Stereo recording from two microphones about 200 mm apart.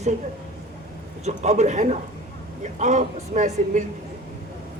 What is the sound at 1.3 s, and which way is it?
A woman's voice, 35° right (ahead or behind).